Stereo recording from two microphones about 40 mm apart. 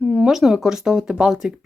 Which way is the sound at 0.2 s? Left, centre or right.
Centre.